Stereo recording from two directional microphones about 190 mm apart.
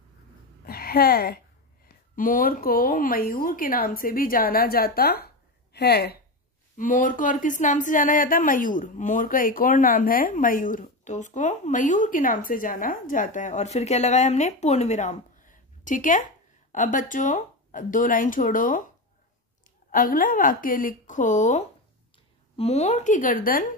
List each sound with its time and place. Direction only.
0.7 s speech: 50° left (ahead or behind)
6.8 s speech: 45° left (ahead or behind)
19.9 s a woman's voice: 45° left (ahead or behind)